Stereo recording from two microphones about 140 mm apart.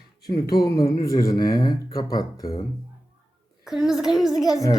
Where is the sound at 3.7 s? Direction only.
5° right (ahead or behind).